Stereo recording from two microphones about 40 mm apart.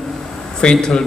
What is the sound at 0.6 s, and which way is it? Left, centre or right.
Speech, centre.